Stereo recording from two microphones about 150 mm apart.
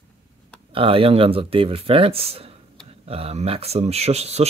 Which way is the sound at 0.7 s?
35° right (ahead or behind).